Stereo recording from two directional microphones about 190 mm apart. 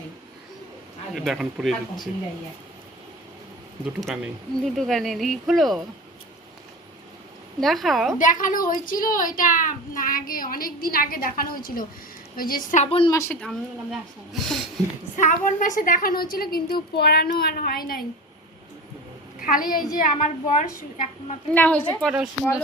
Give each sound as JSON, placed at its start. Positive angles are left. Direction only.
{"t": 1.1, "sound": "speech", "side_deg": 0}
{"t": 4.0, "sound": "speech", "side_deg": 0}
{"t": 7.6, "sound": "speech", "side_deg": 0}
{"t": 8.2, "sound": "a child's voice", "side_deg": 45}
{"t": 13.1, "sound": "a woman's voice", "side_deg": 15}
{"t": 13.4, "sound": "speech", "side_deg": 0}
{"t": 15.1, "sound": "a child's voice", "side_deg": 40}
{"t": 19.4, "sound": "a woman's voice", "side_deg": 45}
{"t": 21.5, "sound": "a woman's voice", "side_deg": 10}